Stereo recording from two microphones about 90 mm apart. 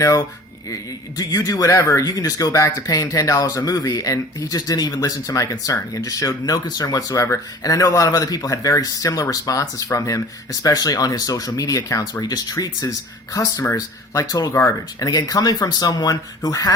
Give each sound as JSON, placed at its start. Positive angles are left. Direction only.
{"t": 0.0, "sound": "speech", "side_deg": 40}